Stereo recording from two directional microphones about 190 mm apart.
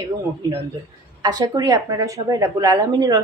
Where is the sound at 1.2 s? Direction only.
20° right (ahead or behind).